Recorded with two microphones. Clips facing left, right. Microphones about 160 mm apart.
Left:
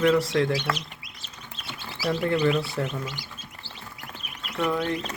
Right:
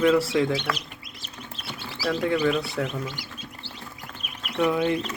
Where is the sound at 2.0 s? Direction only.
Centre (ahead or behind).